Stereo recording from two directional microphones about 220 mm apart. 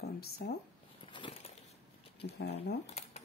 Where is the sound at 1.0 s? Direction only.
20° left (ahead or behind).